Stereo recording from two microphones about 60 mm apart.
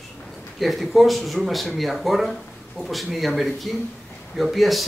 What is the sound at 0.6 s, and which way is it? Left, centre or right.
Speech, centre.